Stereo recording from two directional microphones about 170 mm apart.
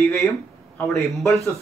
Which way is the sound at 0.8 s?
5° left (ahead or behind).